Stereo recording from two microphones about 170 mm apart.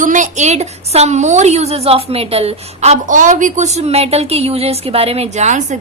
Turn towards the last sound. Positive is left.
turn(degrees=-45)  # may be behind; listen again after turning